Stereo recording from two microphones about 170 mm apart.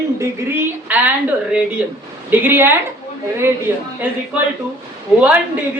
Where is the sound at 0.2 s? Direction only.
10° right (ahead or behind).